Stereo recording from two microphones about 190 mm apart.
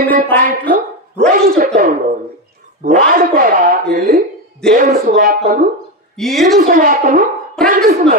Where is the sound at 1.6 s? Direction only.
40° right (ahead or behind).